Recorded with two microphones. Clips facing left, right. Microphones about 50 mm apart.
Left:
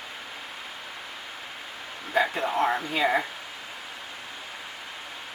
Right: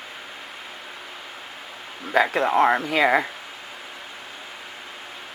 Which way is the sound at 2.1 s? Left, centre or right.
Right.